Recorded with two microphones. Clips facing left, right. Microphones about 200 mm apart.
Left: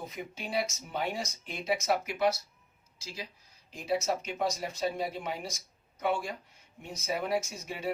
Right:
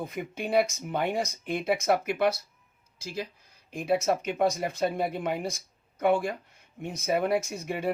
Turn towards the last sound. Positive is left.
turn(degrees=-55)  # may be behind; listen again after turning